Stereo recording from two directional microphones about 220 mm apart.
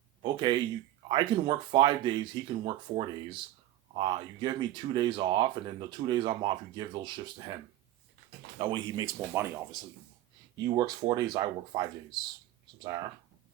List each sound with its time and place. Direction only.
0.2 s a sound: 20° right (ahead or behind)
1.0 s speech: 20° right (ahead or behind)
8.5 s speech: 20° right (ahead or behind)
10.8 s speech: 20° right (ahead or behind)